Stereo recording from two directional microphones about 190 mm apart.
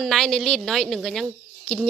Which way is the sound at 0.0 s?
Centre (ahead or behind).